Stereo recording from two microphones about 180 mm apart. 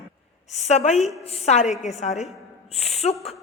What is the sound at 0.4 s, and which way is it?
A man's voice, 40° left (ahead or behind).